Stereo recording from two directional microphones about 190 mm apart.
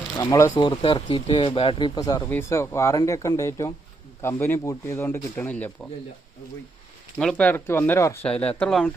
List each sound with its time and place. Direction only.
0.2 s speech: 15° left (ahead or behind)
0.8 s speech: 25° left (ahead or behind); by 5.7 s 10° left (ahead or behind)
7.2 s speech: 5° left (ahead or behind)